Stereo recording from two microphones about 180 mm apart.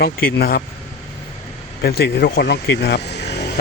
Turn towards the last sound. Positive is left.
turn(degrees=70)  # may be behind; listen again after turning